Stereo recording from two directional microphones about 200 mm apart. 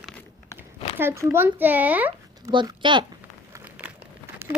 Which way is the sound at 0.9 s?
15° right (ahead or behind).